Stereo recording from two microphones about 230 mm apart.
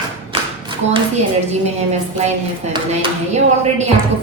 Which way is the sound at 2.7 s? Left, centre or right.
Right.